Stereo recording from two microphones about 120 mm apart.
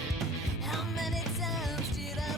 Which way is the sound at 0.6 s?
Centre (ahead or behind).